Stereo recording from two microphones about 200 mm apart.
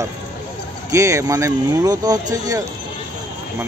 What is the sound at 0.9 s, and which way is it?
Speech, 15° right (ahead or behind).